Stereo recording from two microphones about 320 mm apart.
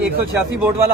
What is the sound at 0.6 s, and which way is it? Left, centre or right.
Speech, centre.